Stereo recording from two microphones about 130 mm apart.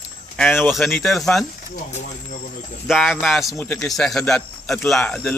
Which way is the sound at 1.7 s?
75° left (ahead or behind).